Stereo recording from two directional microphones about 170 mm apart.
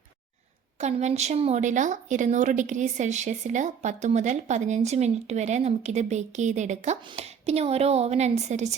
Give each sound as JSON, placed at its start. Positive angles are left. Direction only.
{"t": 0.8, "sound": "speech", "side_deg": -40}